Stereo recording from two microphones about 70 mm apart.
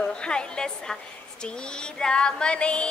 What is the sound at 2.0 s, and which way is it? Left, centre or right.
Speech, centre.